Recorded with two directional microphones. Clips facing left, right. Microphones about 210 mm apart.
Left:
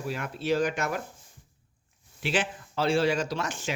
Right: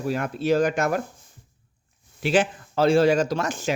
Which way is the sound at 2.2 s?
45° right (ahead or behind).